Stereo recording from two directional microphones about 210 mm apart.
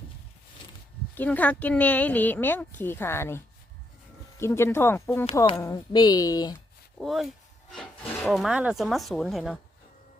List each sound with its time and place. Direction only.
1.1 s speech: 10° left (ahead or behind)
7.0 s speech: centre (ahead or behind)